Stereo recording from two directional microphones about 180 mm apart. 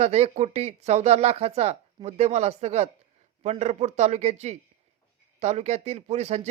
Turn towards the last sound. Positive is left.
turn(degrees=-35)  # may be behind; listen again after turning